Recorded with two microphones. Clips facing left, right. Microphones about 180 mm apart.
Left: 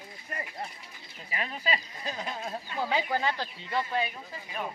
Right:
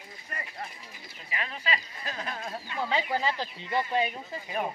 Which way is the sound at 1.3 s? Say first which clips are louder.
Left 1 dB; 40° left (ahead or behind).